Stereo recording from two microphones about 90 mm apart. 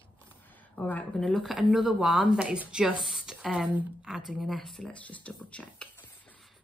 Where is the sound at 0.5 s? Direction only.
20° left (ahead or behind).